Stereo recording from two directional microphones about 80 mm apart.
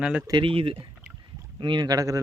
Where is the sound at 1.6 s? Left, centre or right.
Right.